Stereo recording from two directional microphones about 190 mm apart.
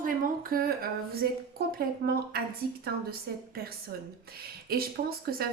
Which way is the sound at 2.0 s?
55° right (ahead or behind).